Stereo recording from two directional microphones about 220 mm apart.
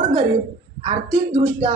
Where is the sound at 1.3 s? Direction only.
20° right (ahead or behind).